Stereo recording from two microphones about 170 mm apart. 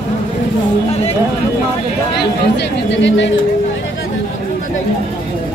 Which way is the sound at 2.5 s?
90° left.